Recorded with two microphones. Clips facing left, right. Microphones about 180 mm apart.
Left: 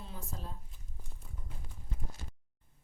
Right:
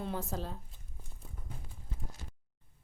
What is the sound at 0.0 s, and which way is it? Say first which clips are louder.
Speech: right 9 dB; 70° right (ahead or behind).